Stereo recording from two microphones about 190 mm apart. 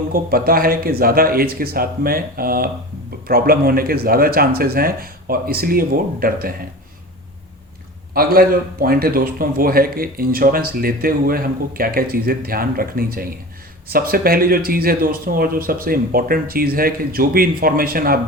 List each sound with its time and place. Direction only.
0.1 s speech: 50° right (ahead or behind)
8.1 s speech: 50° right (ahead or behind)